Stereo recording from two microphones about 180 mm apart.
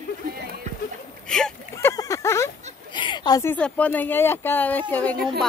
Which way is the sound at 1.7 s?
15° left (ahead or behind).